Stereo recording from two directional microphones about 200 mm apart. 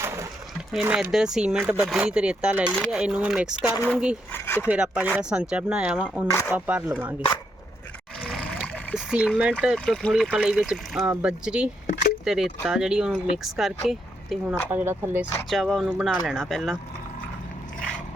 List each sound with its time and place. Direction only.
0.7 s speech: 5° right (ahead or behind)
2.7 s speech: 5° left (ahead or behind)
3.0 s speech: 5° right (ahead or behind)
4.3 s speech: 10° left (ahead or behind)
4.7 s speech: 5° right (ahead or behind)
8.3 s a sound: centre (ahead or behind)
9.7 s speech: 5° left (ahead or behind)
15.4 s speech: centre (ahead or behind)